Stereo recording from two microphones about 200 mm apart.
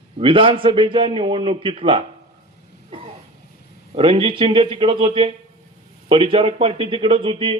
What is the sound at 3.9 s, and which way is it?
A man's voice, 25° right (ahead or behind).